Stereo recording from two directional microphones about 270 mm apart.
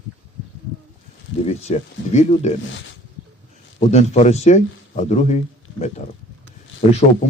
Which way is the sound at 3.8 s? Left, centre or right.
Left.